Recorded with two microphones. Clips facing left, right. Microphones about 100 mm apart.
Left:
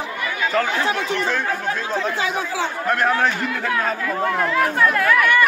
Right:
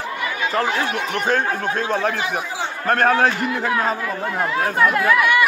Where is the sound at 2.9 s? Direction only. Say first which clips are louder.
Right 4 dB; 45° right (ahead or behind).